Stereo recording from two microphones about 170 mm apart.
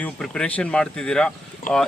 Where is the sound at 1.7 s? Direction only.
50° left (ahead or behind).